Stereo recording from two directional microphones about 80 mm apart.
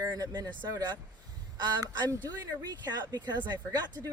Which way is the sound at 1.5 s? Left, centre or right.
Right.